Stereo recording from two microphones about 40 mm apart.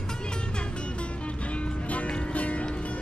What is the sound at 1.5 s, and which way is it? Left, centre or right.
Music, left.